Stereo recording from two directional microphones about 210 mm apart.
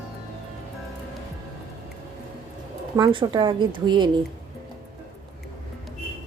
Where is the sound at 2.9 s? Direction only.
20° right (ahead or behind).